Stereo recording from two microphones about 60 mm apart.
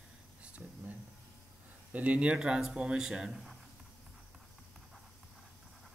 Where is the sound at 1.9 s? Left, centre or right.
Right; by 3.5 s centre.